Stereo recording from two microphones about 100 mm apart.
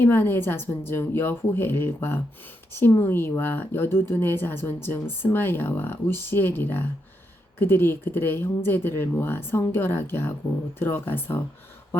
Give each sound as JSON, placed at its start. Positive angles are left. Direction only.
{"t": 0.0, "sound": "speech", "side_deg": 20}